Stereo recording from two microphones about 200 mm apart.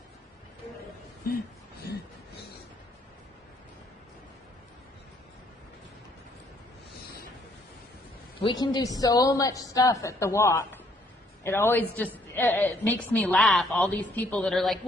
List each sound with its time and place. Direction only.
8.4 s a woman's voice: 25° left (ahead or behind); by 14.8 s centre (ahead or behind)